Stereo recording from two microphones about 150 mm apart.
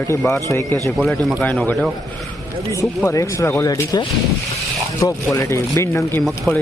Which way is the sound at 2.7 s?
20° left (ahead or behind).